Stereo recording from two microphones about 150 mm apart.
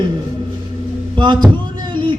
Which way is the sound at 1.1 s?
30° right (ahead or behind).